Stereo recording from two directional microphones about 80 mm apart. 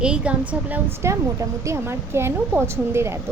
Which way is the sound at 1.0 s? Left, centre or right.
Right.